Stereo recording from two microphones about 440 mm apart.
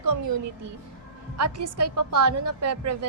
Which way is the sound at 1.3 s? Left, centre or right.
Right.